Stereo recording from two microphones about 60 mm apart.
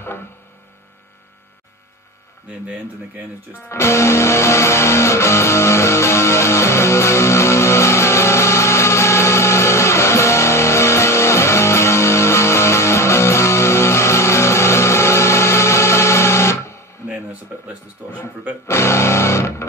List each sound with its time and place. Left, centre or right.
3.6 s music: left
18.7 s music: left